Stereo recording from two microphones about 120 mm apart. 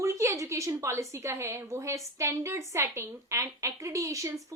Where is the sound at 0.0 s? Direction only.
25° right (ahead or behind).